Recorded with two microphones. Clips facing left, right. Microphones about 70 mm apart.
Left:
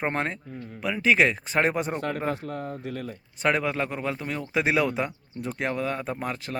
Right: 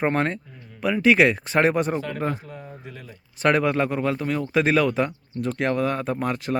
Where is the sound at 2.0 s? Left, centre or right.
Left.